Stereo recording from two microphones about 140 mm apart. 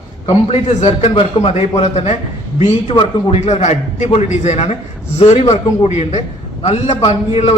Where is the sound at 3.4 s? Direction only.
55° left (ahead or behind).